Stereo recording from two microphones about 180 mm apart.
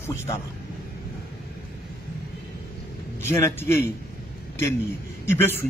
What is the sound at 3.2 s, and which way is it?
Speech, 15° left (ahead or behind).